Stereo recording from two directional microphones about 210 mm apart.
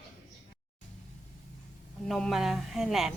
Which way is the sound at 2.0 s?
Centre (ahead or behind).